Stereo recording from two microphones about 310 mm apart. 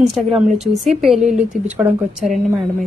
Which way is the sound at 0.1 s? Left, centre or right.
Centre.